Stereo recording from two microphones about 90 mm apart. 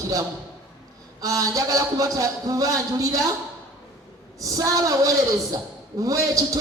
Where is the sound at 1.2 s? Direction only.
40° right (ahead or behind).